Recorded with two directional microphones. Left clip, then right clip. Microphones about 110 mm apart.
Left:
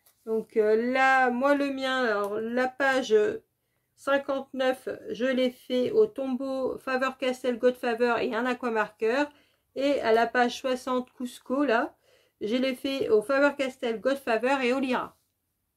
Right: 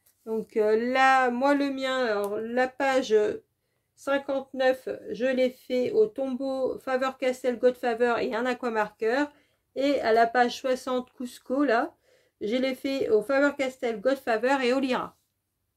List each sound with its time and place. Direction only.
0.2 s speech: 40° right (ahead or behind)
1.6 s speech: 20° right (ahead or behind)
4.0 s speech: 15° right (ahead or behind); by 15.0 s 35° right (ahead or behind)